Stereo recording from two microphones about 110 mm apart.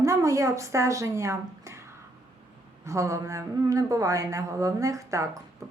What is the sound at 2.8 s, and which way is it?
Speech, 30° right (ahead or behind).